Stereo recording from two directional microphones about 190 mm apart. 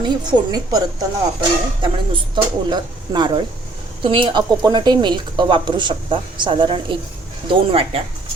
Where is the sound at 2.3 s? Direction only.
25° right (ahead or behind).